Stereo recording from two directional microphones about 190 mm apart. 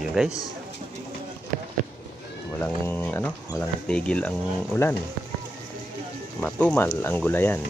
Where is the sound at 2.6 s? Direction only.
10° left (ahead or behind).